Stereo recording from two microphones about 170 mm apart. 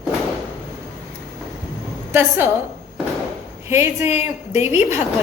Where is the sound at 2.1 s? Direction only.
15° right (ahead or behind).